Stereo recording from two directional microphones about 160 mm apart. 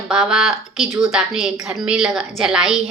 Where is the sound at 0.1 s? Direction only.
5° right (ahead or behind).